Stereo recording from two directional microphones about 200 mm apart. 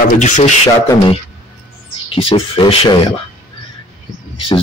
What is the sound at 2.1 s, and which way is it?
Speech, 30° left (ahead or behind).